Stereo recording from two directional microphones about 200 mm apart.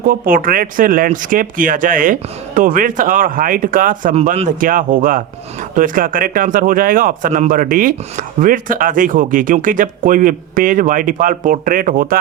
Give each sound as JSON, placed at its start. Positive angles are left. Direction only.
{"t": 0.0, "sound": "speech", "side_deg": -45}